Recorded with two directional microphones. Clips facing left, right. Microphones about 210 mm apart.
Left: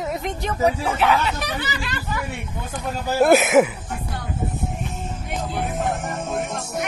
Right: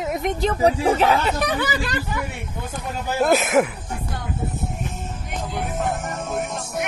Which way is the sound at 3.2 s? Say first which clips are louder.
Left 3 dB; 5° left (ahead or behind).